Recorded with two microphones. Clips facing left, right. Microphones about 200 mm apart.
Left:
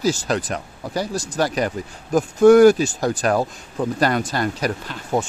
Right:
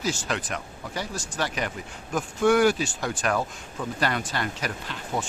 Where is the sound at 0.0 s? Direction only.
40° left (ahead or behind).